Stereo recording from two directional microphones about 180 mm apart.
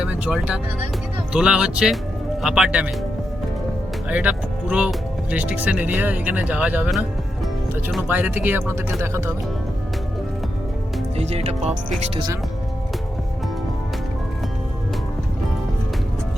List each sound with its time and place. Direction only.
0.0 s speech: 5° right (ahead or behind)
4.1 s speech: 5° right (ahead or behind)
8.0 s speech: 10° right (ahead or behind)
11.2 s speech: 35° right (ahead or behind)